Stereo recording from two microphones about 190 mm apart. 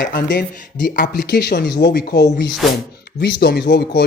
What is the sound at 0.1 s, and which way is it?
Speech, 55° left (ahead or behind).